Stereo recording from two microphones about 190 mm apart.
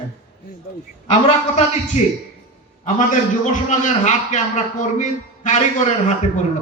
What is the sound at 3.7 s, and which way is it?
A man's voice, 40° left (ahead or behind).